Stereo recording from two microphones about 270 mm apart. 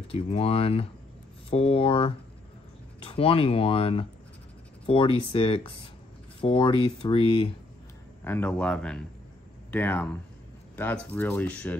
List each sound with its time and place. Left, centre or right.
0.1 s speech: left
8.2 s speech: centre